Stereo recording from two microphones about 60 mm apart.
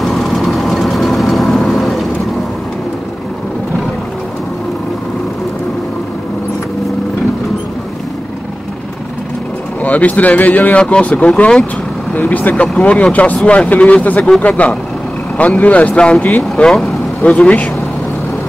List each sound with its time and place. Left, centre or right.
0.0 s vehicle: centre
9.8 s speech: left
10.8 s speech: centre
12.1 s speech: left
16.6 s speech: centre
17.2 s speech: left